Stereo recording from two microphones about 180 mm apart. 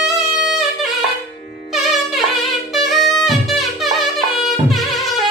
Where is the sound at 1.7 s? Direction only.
Centre (ahead or behind).